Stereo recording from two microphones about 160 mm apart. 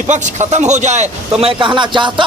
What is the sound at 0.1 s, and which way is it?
A man's voice, 45° right (ahead or behind).